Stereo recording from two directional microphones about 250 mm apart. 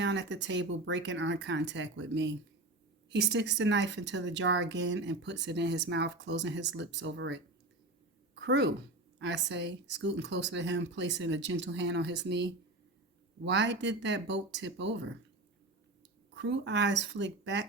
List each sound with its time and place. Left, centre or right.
0.0 s speech: right
16.3 s speech: right